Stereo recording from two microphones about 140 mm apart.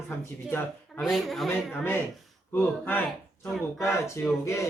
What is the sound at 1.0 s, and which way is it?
Speech, centre (ahead or behind).